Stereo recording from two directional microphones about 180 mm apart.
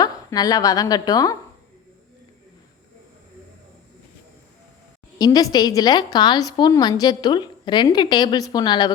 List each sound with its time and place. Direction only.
0.0 s a woman's voice: 20° left (ahead or behind)
5.1 s a woman's voice: 20° left (ahead or behind)